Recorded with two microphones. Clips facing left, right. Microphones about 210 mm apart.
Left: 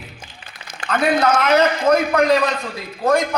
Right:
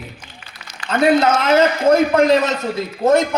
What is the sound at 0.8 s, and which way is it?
A man's voice, 25° right (ahead or behind).